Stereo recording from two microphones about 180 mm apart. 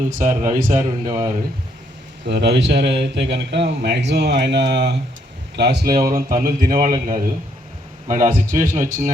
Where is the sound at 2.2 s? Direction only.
70° right (ahead or behind).